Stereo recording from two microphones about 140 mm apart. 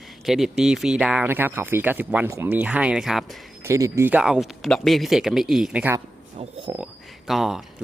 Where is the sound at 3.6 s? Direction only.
20° right (ahead or behind).